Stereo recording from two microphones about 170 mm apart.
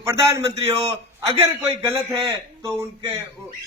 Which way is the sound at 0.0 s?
15° right (ahead or behind).